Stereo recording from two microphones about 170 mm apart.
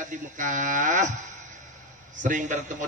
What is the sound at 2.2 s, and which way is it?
Speech, 50° right (ahead or behind).